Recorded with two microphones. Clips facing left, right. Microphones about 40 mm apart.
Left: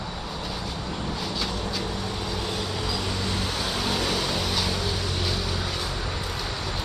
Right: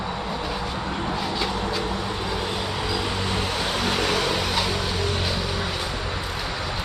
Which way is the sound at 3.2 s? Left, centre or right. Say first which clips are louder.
Right 3 dB; right.